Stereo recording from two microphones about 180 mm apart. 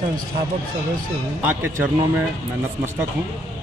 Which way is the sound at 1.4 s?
10° right (ahead or behind).